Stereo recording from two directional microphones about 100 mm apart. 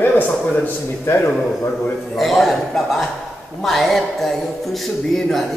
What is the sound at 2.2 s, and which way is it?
Speech, centre (ahead or behind).